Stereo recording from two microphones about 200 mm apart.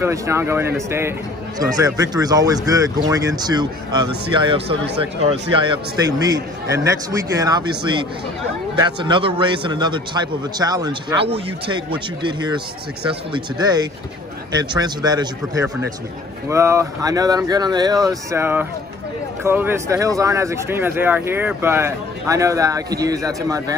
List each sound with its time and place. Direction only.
0.0 s a man's voice: 15° right (ahead or behind)
6.0 s speech: 20° right (ahead or behind)
8.7 s a man's voice: 20° right (ahead or behind)